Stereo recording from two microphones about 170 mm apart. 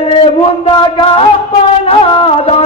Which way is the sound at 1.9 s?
35° left (ahead or behind).